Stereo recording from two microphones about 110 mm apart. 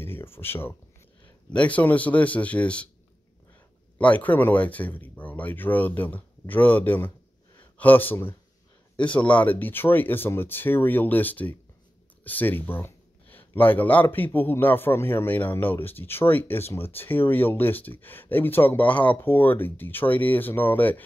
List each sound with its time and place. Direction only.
0.0 s speech: 20° left (ahead or behind)
4.0 s speech: 15° left (ahead or behind)